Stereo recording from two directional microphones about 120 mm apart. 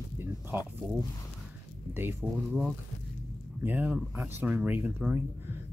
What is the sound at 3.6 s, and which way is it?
Speech, 15° right (ahead or behind).